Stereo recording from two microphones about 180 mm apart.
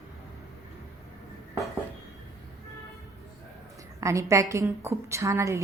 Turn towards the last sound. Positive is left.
turn(degrees=-15)  # may be behind; listen again after turning